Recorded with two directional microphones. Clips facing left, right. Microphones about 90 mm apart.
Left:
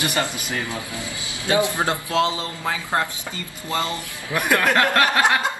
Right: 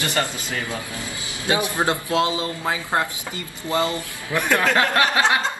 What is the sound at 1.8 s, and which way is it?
Speech, 20° right (ahead or behind).